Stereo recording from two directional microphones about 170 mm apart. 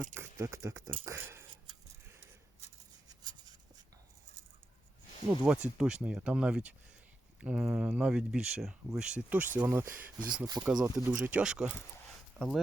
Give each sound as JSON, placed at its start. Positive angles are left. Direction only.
{"t": 0.1, "sound": "speech", "side_deg": -15}
{"t": 5.4, "sound": "speech", "side_deg": -10}
{"t": 10.4, "sound": "speech", "side_deg": -20}
{"t": 10.9, "sound": "speech", "side_deg": -5}